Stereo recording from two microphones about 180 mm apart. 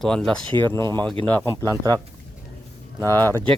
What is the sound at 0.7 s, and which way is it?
Speech, 15° left (ahead or behind).